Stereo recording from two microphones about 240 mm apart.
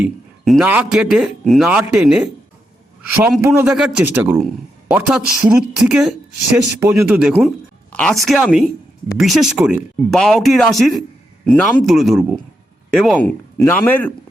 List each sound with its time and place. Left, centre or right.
0.0 s a man's voice: centre